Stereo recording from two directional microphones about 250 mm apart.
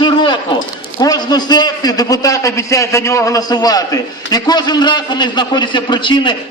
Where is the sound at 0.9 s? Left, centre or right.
Centre.